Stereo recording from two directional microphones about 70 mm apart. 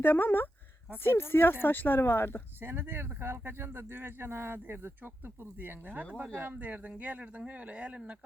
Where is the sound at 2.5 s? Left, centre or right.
Right.